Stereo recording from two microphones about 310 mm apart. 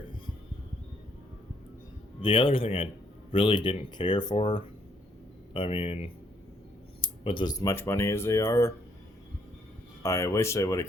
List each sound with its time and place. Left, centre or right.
2.2 s speech: centre
10.0 s speech: centre